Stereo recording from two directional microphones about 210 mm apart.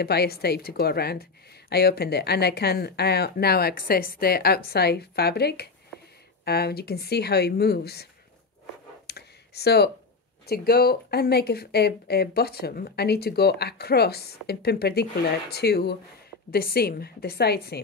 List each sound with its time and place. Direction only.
0.0 s speech: 50° left (ahead or behind)
9.0 s a sound: 50° left (ahead or behind)
10.4 s speech: 45° left (ahead or behind)